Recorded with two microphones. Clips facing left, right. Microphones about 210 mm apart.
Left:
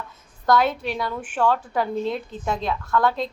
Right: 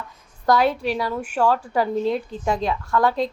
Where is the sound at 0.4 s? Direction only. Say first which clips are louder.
Right 2 dB; 10° right (ahead or behind).